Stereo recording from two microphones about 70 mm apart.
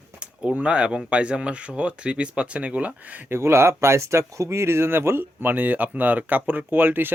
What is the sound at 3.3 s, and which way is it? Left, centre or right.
Speech, right.